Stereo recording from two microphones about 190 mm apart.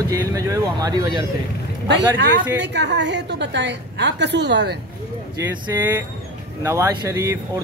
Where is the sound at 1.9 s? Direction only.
65° right (ahead or behind).